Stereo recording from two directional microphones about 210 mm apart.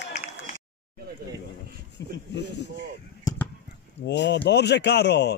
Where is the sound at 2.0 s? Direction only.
55° left (ahead or behind).